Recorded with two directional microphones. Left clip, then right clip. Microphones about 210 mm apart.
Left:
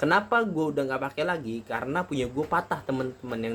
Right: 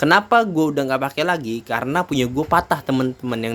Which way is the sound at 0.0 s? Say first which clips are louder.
Right 8 dB; 45° right (ahead or behind).